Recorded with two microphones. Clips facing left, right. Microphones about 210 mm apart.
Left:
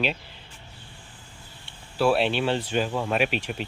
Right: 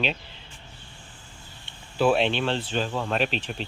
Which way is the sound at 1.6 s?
5° left (ahead or behind).